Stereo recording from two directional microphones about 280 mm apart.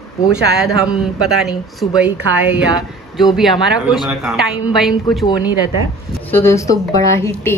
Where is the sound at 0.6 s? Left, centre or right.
Centre.